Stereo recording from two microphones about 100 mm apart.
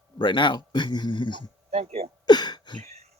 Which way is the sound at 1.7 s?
90° right.